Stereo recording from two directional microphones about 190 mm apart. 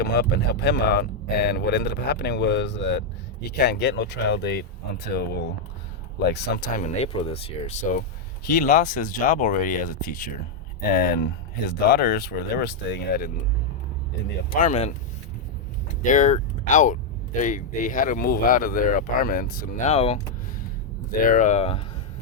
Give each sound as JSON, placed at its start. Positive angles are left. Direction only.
{"t": 0.0, "sound": "speech", "side_deg": 55}
{"t": 6.7, "sound": "speech", "side_deg": 35}
{"t": 8.4, "sound": "speech", "side_deg": 45}
{"t": 14.5, "sound": "speech", "side_deg": 40}
{"t": 16.0, "sound": "speech", "side_deg": 40}
{"t": 19.9, "sound": "speech", "side_deg": 35}
{"t": 21.2, "sound": "speech", "side_deg": 40}